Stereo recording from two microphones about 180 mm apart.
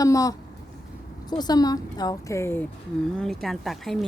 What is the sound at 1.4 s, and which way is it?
Speech, 20° left (ahead or behind).